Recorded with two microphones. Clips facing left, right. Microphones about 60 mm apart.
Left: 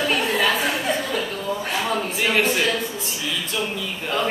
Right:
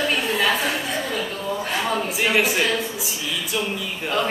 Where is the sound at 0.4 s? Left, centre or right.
Centre.